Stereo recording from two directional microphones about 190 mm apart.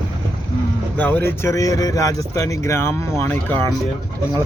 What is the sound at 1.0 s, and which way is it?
Speech, 10° left (ahead or behind).